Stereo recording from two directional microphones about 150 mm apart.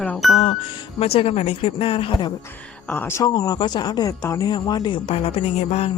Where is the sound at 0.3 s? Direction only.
50° left (ahead or behind).